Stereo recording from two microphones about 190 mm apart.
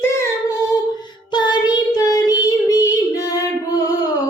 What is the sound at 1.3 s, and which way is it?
Child singing, 25° left (ahead or behind).